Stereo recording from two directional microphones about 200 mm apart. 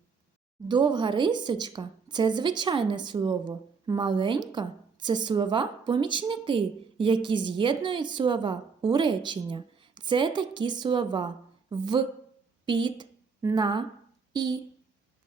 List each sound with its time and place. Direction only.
0.7 s a woman's voice: 25° right (ahead or behind)